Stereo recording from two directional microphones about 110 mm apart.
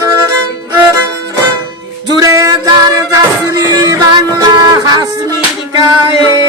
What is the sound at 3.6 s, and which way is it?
Music, 30° right (ahead or behind).